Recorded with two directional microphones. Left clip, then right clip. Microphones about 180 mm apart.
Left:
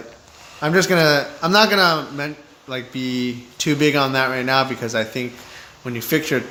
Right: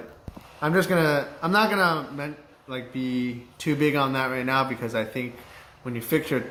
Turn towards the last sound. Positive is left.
turn(degrees=20)  # may be behind; listen again after turning